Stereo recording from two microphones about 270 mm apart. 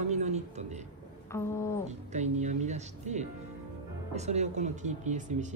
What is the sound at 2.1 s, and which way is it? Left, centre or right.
Speech, right.